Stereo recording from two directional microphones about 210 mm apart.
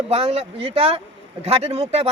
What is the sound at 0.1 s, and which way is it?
Speech, 30° right (ahead or behind).